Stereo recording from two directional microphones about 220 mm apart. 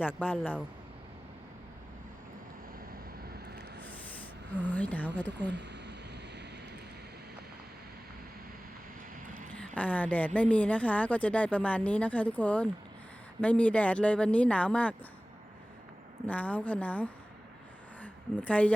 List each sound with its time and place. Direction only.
0.2 s speech: 10° left (ahead or behind)
3.2 s vehicle: 45° right (ahead or behind)
4.5 s speech: 10° left (ahead or behind)
5.5 s a sound: 50° right (ahead or behind)
9.3 s speech: 5° left (ahead or behind)
16.2 s a woman's voice: 5° left (ahead or behind)